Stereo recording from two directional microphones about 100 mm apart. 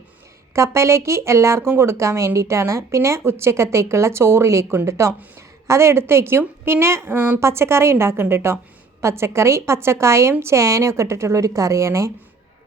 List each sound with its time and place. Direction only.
0.5 s a woman's voice: 30° right (ahead or behind)